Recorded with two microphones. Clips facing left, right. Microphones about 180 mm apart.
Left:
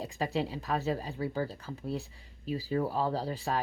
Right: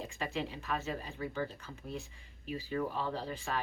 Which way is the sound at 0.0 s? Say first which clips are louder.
Left 5 dB; 35° left (ahead or behind).